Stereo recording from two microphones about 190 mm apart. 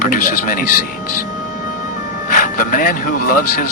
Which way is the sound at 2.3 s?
45° left (ahead or behind).